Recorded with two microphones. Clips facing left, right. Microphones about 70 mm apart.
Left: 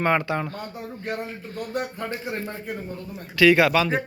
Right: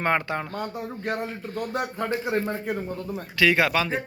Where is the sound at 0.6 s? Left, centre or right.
Right.